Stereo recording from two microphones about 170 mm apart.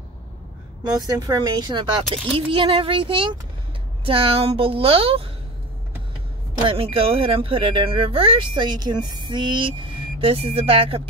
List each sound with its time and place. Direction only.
1.0 s speech: 20° right (ahead or behind)
6.7 s speech: 35° right (ahead or behind)